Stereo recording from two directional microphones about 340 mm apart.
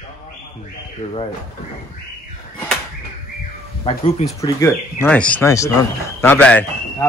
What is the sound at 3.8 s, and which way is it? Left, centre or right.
A man's voice, centre.